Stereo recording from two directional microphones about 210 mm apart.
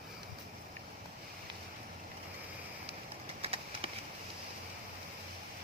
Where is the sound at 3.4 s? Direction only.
25° right (ahead or behind).